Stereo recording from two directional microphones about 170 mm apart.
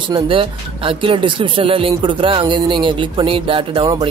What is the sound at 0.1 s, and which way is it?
Speech, 30° right (ahead or behind).